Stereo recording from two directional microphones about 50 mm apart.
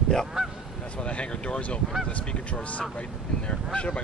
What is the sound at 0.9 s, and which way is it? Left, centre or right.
Speech, left.